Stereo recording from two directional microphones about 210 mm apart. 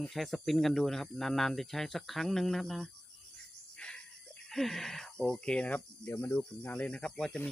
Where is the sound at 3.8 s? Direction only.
5° left (ahead or behind).